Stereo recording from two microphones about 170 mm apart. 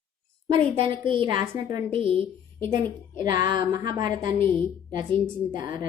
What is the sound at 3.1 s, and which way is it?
A woman's voice, 25° right (ahead or behind).